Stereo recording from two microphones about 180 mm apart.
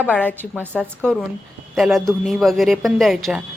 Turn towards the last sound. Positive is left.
turn(degrees=0)  # may be behind; listen again after turning